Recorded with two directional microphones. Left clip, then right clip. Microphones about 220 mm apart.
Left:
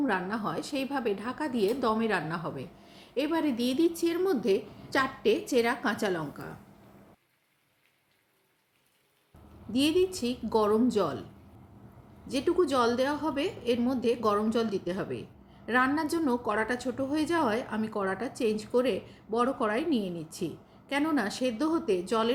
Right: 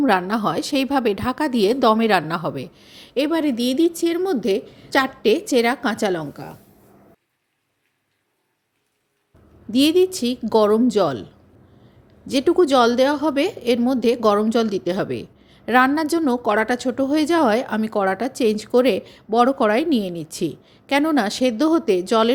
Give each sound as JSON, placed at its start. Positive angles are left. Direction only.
{"t": 0.0, "sound": "a woman's voice", "side_deg": -45}
{"t": 9.7, "sound": "a woman's voice", "side_deg": -40}
{"t": 12.3, "sound": "a woman's voice", "side_deg": -40}